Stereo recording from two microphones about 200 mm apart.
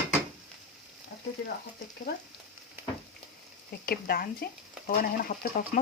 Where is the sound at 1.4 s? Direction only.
60° left (ahead or behind).